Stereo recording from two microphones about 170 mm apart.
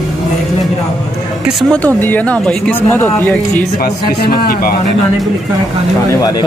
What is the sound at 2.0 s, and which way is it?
Speech, 10° left (ahead or behind).